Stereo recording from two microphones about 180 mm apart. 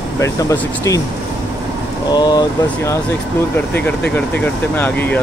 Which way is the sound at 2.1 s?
20° left (ahead or behind).